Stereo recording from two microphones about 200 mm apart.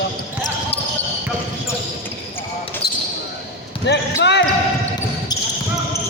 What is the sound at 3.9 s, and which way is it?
Speech, 60° left (ahead or behind).